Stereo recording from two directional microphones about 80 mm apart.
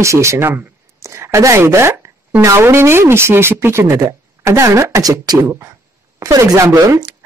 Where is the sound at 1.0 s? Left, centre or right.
Right.